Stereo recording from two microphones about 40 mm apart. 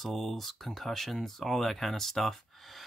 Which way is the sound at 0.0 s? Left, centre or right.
Centre.